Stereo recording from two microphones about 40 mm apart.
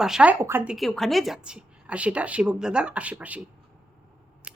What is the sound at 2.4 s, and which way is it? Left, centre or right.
Speech, right.